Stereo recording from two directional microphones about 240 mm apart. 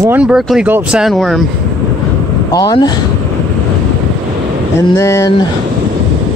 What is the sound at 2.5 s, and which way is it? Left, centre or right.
Speech, centre.